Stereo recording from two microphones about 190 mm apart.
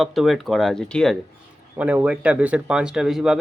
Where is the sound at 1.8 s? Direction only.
10° right (ahead or behind).